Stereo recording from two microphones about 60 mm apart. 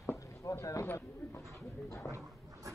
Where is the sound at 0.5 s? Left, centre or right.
Left.